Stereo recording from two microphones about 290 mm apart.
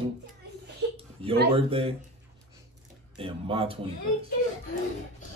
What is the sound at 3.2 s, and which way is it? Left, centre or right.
Speech, centre.